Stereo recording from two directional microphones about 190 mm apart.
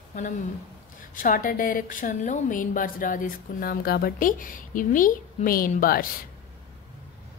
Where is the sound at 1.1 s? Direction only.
45° left (ahead or behind).